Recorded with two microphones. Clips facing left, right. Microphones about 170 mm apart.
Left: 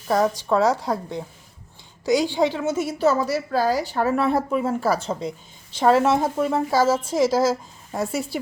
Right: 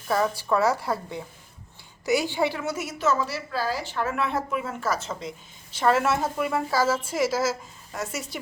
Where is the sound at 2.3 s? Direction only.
15° left (ahead or behind).